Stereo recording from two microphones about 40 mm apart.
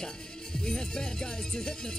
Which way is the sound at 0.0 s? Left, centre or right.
Centre.